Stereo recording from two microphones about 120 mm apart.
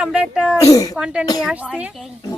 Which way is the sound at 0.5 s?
30° left (ahead or behind).